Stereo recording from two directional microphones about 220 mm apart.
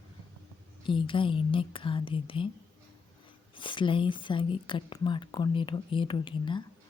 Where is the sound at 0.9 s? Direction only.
20° left (ahead or behind).